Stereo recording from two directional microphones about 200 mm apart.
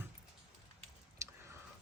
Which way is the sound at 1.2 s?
15° right (ahead or behind).